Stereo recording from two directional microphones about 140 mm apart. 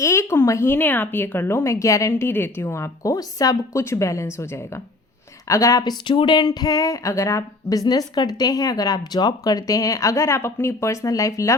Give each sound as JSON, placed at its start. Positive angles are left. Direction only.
{"t": 0.0, "sound": "speech", "side_deg": 20}